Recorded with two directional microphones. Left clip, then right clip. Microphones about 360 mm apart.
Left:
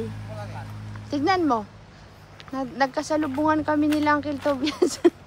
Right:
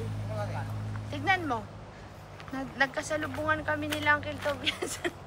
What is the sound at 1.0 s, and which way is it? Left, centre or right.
Speech, centre.